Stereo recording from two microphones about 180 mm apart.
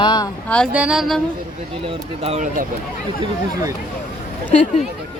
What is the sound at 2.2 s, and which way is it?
Speech, 35° right (ahead or behind).